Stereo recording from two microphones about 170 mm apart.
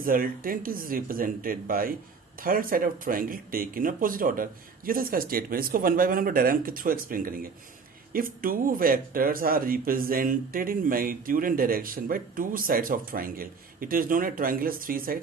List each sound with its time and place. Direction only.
0.0 s speech: 55° right (ahead or behind)